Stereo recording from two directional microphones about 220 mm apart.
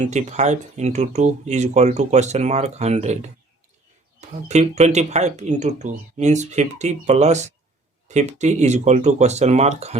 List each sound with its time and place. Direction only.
0.0 s speech: 30° right (ahead or behind)